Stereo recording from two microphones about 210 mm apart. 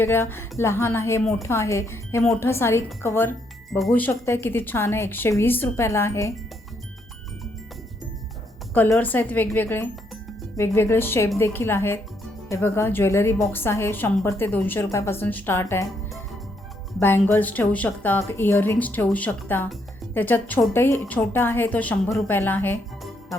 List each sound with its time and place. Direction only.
0.0 s a woman's voice: 10° left (ahead or behind)
3.7 s a woman's voice: centre (ahead or behind)
8.7 s a woman's voice: 10° left (ahead or behind)
17.0 s a woman's voice: 10° left (ahead or behind)